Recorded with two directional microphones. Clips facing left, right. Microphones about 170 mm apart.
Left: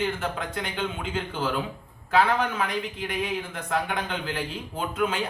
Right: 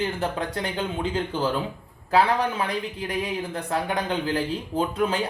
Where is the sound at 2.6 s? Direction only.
35° right (ahead or behind).